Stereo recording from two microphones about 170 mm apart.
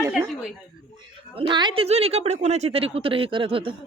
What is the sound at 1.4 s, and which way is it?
A woman's voice, 30° right (ahead or behind).